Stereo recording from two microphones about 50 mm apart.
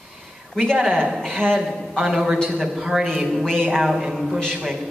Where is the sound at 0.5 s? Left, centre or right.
Centre.